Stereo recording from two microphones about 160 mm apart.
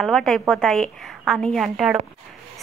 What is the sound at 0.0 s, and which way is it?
A woman's voice, 5° left (ahead or behind).